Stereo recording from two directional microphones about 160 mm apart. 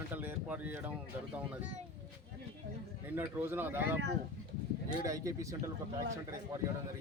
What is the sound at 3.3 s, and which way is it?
Speech, 10° right (ahead or behind).